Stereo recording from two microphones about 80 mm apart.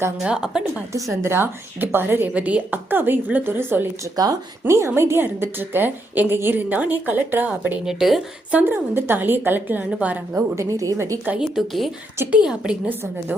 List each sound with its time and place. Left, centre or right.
0.2 s a woman's voice: centre
0.9 s a woman's voice: right
1.3 s a woman's voice: right
7.9 s speech: centre
8.5 s a woman's voice: right
10.5 s a woman's voice: right
10.9 s speech: right
11.3 s a woman's voice: centre